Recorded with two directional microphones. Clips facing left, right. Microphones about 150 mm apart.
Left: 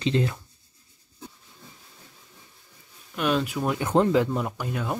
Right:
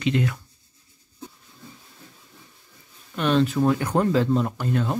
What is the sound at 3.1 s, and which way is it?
Speech, 5° left (ahead or behind).